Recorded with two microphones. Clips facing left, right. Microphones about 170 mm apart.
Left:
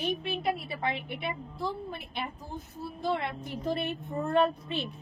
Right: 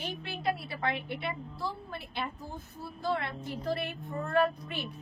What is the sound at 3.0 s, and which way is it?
A woman's voice, 20° left (ahead or behind).